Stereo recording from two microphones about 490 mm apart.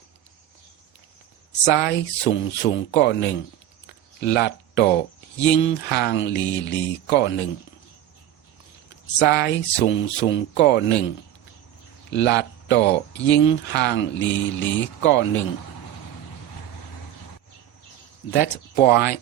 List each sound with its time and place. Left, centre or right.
1.6 s speech: centre
3.8 s a sound: centre
5.5 s speech: left
9.1 s speech: centre
12.1 s speech: left
18.3 s speech: centre